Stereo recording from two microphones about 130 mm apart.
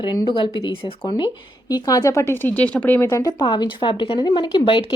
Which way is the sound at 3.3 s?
40° left (ahead or behind).